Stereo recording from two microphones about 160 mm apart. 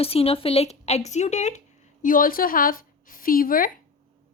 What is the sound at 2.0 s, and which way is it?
A woman's voice, 60° left (ahead or behind).